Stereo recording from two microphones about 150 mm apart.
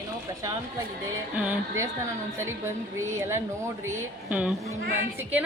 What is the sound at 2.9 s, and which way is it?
Speech, 20° right (ahead or behind).